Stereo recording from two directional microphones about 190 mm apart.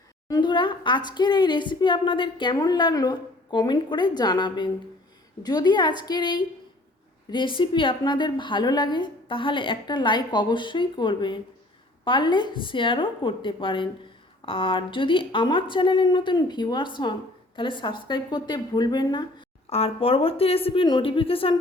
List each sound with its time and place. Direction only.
0.3 s a woman's voice: 20° left (ahead or behind)